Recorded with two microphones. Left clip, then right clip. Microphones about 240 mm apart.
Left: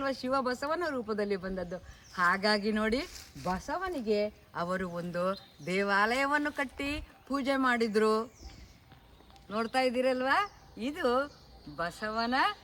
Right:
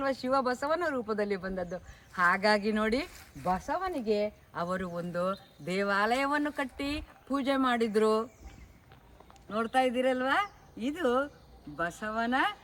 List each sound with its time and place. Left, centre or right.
0.0 s speech: centre
9.5 s speech: centre
10.8 s speech: left